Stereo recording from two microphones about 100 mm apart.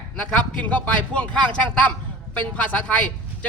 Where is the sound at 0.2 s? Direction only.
15° left (ahead or behind).